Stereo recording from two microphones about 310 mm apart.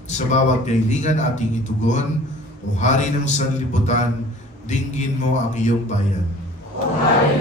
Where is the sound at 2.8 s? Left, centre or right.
Left.